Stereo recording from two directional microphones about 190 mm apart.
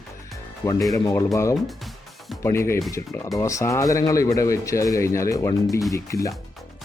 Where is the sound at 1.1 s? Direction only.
15° left (ahead or behind).